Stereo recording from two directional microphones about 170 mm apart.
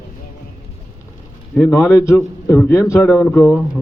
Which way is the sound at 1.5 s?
5° left (ahead or behind).